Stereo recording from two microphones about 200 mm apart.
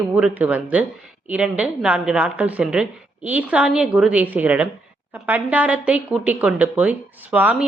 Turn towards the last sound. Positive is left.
turn(degrees=-10)  # may be behind; listen again after turning